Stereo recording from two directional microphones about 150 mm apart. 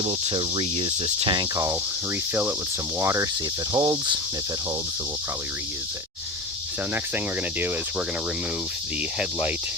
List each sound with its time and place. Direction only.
0.0 s cricket: 40° right (ahead or behind)
1.5 s cricket: 20° right (ahead or behind)
3.7 s cricket: 30° right (ahead or behind)